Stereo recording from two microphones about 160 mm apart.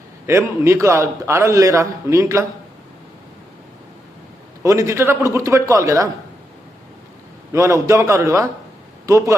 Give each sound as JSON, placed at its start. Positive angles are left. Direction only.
{"t": 0.3, "sound": "a man's voice", "side_deg": -15}
{"t": 4.6, "sound": "a man's voice", "side_deg": -20}
{"t": 7.5, "sound": "a man's voice", "side_deg": -15}